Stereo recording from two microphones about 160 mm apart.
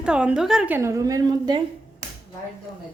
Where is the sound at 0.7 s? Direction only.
20° right (ahead or behind).